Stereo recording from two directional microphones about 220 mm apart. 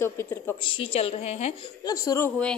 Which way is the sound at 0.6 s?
25° left (ahead or behind).